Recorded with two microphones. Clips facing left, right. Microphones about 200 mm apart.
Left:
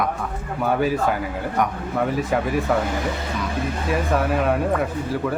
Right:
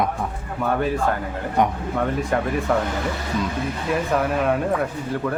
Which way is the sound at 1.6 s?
25° right (ahead or behind).